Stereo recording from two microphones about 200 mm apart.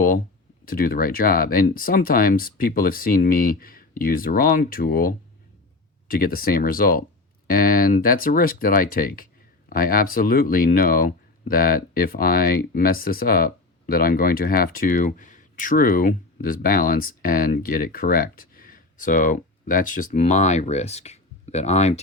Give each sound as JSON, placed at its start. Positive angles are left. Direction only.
{"t": 0.6, "sound": "speech", "side_deg": 45}